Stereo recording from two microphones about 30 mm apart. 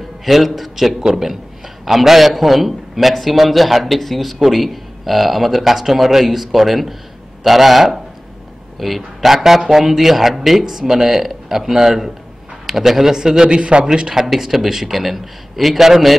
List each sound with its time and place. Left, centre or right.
0.2 s a man's voice: centre
10.6 s speech: right
10.9 s speech: centre
13.5 s a man's voice: right
14.2 s a man's voice: centre